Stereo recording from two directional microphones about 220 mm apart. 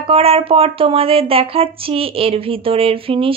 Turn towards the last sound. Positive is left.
turn(degrees=-25)  # may be behind; listen again after turning